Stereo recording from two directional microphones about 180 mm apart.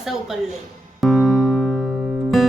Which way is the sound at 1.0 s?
Centre (ahead or behind).